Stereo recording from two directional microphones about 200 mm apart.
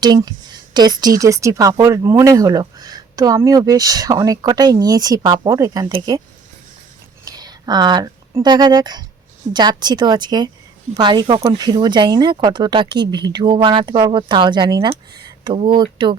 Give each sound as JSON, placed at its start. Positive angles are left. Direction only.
{"t": 0.0, "sound": "speech", "side_deg": -20}
{"t": 7.3, "sound": "speech", "side_deg": -20}